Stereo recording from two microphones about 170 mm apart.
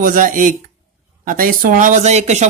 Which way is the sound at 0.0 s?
50° right (ahead or behind).